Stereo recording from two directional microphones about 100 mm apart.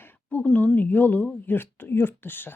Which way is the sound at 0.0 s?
15° left (ahead or behind).